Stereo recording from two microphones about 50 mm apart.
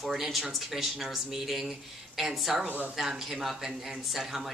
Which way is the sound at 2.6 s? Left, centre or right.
Right.